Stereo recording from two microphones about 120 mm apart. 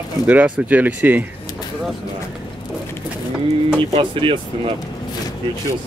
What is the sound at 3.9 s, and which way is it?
Speech, 45° right (ahead or behind).